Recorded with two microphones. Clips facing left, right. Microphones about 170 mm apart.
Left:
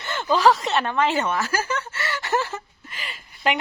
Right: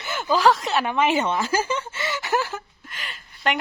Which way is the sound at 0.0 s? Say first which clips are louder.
Left 1 dB; 5° right (ahead or behind).